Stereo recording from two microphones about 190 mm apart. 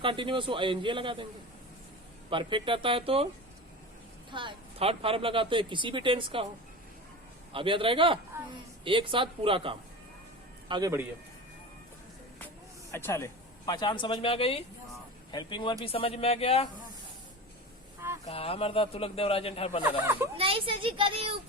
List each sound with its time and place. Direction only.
0.0 s speech: 25° right (ahead or behind)
2.3 s speech: 25° right (ahead or behind)
4.3 s speech: 25° right (ahead or behind)
7.5 s speech: 25° right (ahead or behind)
12.9 s a man's voice: 15° left (ahead or behind); by 16.6 s 30° left (ahead or behind)
18.3 s a man's voice: 30° left (ahead or behind)
20.3 s speech: 30° right (ahead or behind)